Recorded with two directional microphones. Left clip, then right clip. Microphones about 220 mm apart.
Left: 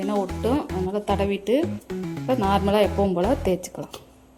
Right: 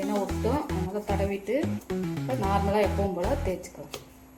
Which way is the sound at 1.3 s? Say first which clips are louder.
Left 6 dB; 45° left (ahead or behind).